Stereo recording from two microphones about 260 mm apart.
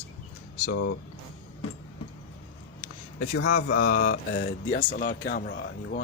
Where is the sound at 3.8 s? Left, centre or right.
Left.